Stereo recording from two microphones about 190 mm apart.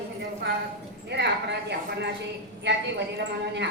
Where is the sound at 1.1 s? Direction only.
65° right (ahead or behind).